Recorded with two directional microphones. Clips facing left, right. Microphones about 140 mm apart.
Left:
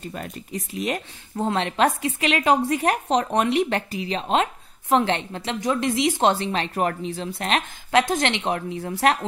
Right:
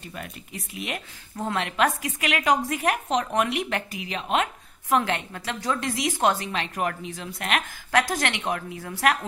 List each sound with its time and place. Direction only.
0.0 s speech: 35° left (ahead or behind)